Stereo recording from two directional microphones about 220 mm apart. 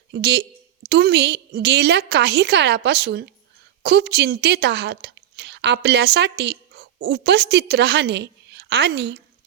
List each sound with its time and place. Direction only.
0.1 s a woman's voice: 50° right (ahead or behind)